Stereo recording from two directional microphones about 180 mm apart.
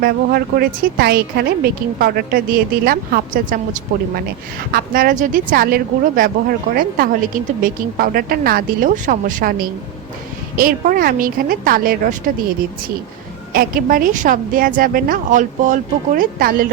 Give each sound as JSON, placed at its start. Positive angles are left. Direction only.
{"t": 0.0, "sound": "a woman's voice", "side_deg": -55}
{"t": 13.5, "sound": "speech", "side_deg": -55}